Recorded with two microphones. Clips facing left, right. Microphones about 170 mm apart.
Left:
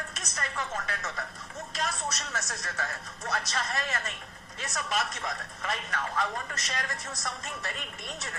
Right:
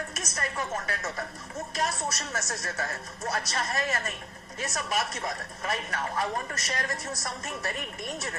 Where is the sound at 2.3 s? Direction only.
35° right (ahead or behind).